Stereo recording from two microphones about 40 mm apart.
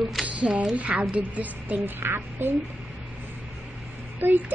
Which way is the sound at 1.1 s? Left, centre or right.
Right.